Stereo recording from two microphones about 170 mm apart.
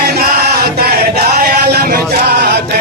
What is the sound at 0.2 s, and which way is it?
Male singing, 65° right (ahead or behind).